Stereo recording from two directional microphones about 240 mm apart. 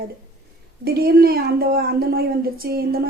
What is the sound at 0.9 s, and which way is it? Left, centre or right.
A woman's voice, right.